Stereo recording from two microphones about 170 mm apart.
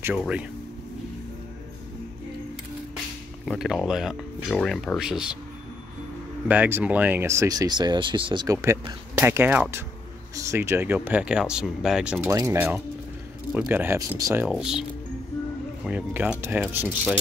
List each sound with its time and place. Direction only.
0.2 s speech: 5° right (ahead or behind)
3.4 s speech: centre (ahead or behind)
6.4 s speech: 10° right (ahead or behind)
12.3 s speech: 20° right (ahead or behind)
13.5 s speech: 5° right (ahead or behind)
14.5 s speech: 5° right (ahead or behind)